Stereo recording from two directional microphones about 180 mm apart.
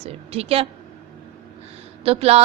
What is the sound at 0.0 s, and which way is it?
Speech, 35° right (ahead or behind).